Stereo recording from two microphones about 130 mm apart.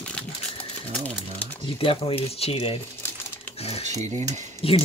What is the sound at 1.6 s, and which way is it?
Speech, 45° left (ahead or behind).